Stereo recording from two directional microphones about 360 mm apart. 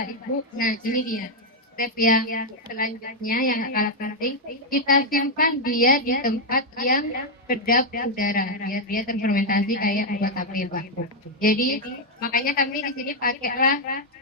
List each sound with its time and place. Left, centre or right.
0.6 s a woman's voice: left